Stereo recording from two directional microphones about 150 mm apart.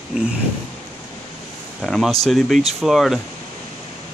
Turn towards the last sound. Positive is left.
turn(degrees=0)  # may be behind; listen again after turning